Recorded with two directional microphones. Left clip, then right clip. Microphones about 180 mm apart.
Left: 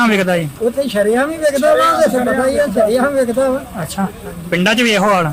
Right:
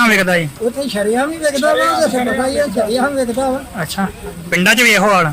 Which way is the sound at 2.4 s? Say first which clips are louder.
Left 2 dB; 30° left (ahead or behind).